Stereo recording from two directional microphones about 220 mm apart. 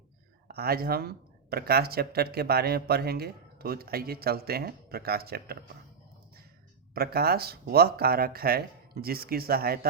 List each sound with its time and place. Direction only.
0.4 s speech: 45° right (ahead or behind)
6.9 s speech: 45° right (ahead or behind)